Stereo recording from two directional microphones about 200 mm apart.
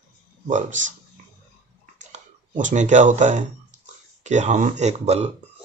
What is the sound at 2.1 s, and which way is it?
Speech, 40° right (ahead or behind).